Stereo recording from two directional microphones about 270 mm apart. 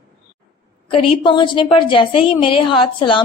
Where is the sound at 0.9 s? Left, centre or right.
Centre.